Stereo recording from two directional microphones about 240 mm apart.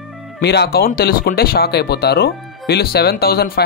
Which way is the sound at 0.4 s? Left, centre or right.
Left.